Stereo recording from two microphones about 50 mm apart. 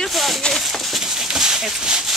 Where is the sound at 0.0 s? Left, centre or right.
Centre.